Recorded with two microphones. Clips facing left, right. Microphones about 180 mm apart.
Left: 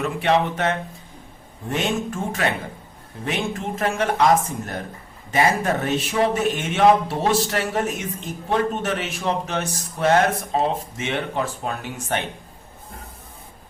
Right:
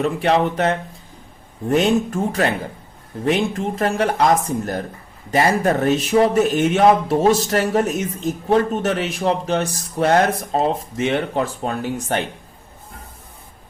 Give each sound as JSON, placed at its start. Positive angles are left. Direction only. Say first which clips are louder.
{"t": 0.0, "sound": "speech", "louder": "right 3 dB", "side_deg": -35}